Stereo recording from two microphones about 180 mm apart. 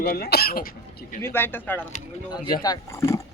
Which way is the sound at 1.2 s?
15° left (ahead or behind).